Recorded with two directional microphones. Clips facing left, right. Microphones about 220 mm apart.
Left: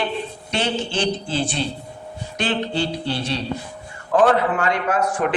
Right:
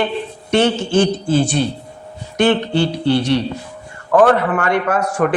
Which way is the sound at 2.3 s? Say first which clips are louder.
Right 8 dB; 60° right (ahead or behind).